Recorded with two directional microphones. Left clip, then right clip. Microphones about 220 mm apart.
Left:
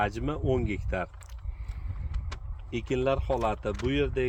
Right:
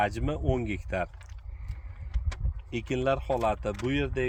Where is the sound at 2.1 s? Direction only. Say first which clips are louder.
Right 2 dB; 45° right (ahead or behind).